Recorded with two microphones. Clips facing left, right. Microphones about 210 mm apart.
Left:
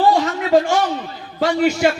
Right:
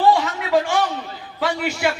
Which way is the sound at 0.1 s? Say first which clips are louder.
Left 3 dB; 40° left (ahead or behind).